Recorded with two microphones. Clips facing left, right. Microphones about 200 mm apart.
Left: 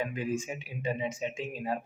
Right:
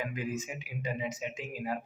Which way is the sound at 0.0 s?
30° left (ahead or behind).